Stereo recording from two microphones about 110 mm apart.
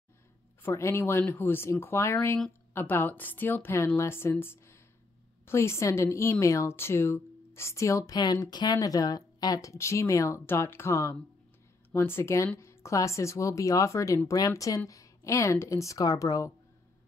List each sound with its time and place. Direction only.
0.6 s a woman's voice: 25° left (ahead or behind)